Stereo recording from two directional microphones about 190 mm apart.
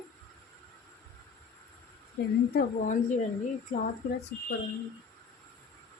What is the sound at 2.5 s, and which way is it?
Speech, 45° left (ahead or behind).